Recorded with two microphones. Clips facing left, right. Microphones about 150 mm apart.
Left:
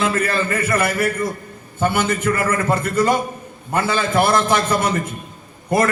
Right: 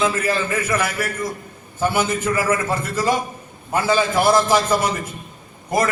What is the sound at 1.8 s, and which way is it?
Speech, centre (ahead or behind).